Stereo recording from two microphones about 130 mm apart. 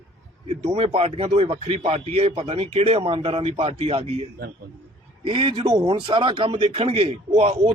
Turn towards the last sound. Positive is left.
turn(degrees=-55)  # may be behind; listen again after turning